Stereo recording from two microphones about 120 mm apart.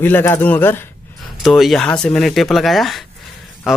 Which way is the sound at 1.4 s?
Centre (ahead or behind).